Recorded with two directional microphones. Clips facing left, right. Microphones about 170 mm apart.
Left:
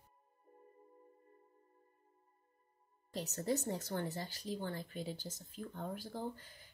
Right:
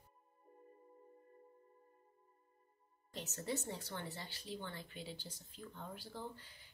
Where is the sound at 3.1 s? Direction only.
40° left (ahead or behind).